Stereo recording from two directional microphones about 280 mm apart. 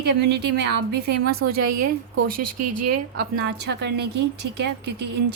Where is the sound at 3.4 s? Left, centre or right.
Right.